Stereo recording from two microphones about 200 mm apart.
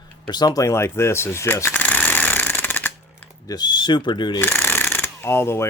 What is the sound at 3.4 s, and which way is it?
Speech, 20° left (ahead or behind).